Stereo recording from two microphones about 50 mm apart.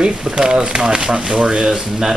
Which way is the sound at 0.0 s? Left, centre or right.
Centre.